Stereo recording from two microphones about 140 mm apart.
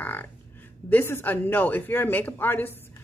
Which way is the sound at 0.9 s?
15° left (ahead or behind).